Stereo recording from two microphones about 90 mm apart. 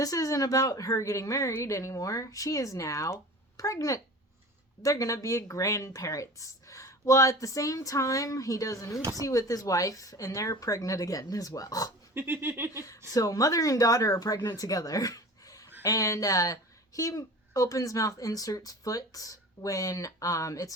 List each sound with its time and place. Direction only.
0.0 s speech: 40° left (ahead or behind)
12.1 s a sound: 25° right (ahead or behind)
13.1 s speech: 40° left (ahead or behind)